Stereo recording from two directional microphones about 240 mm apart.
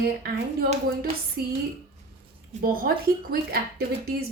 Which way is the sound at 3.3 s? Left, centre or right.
Right.